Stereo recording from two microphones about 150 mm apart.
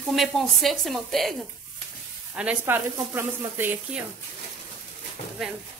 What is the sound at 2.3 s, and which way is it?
A woman's voice, 10° right (ahead or behind).